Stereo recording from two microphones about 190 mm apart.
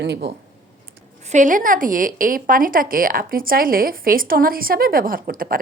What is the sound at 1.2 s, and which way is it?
Speech, 40° right (ahead or behind).